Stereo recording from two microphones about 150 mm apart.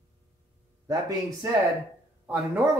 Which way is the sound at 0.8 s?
25° right (ahead or behind).